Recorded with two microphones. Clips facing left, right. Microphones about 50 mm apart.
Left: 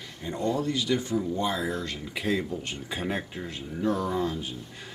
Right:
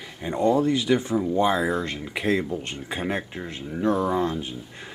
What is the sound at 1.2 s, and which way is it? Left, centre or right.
Speech, right.